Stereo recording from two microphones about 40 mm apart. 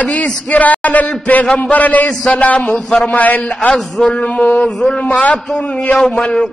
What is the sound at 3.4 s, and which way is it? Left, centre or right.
Speech, left.